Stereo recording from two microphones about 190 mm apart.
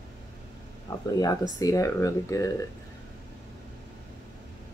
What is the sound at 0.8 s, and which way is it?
Speech, 20° left (ahead or behind).